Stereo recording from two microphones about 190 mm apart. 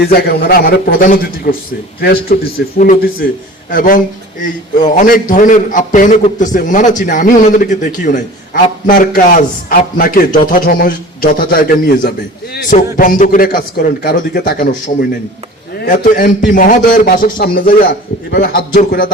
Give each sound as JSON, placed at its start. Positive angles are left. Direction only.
{"t": 0.0, "sound": "a man's voice", "side_deg": 55}
{"t": 16.1, "sound": "a man's voice", "side_deg": 60}
{"t": 16.5, "sound": "a man's voice", "side_deg": 45}